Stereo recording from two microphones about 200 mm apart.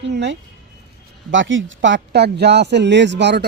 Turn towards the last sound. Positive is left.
turn(degrees=-60)  # may be behind; listen again after turning